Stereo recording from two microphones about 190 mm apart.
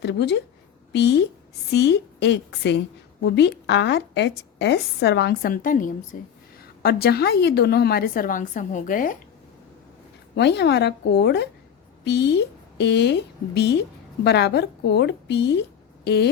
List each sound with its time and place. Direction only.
0.0 s a woman's voice: 65° left (ahead or behind); by 9.1 s 45° left (ahead or behind)
10.3 s a woman's voice: 65° left (ahead or behind)